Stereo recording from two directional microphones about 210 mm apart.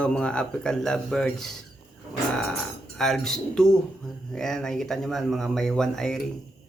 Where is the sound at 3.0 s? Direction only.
Centre (ahead or behind).